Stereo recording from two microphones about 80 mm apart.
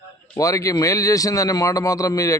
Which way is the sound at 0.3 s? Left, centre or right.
Left.